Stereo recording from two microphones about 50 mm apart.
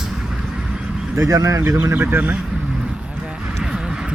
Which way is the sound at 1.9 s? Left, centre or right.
Right.